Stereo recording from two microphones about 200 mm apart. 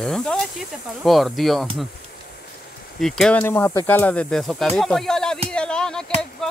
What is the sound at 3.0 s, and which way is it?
Speech, centre (ahead or behind).